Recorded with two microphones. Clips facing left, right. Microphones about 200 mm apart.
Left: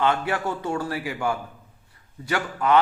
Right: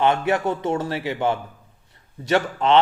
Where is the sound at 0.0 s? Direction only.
20° right (ahead or behind).